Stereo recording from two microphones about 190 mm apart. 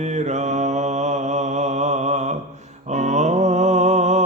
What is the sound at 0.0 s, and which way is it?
Mantra, 35° right (ahead or behind).